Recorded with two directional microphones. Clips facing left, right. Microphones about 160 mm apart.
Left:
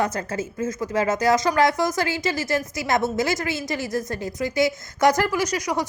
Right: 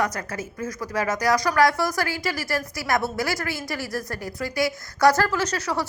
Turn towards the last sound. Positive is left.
turn(degrees=15)  # may be behind; listen again after turning